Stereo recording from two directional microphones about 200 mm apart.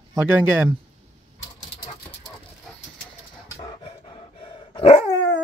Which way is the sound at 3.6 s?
25° left (ahead or behind).